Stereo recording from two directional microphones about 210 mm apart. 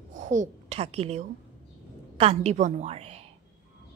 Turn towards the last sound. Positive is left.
turn(degrees=-30)  # may be behind; listen again after turning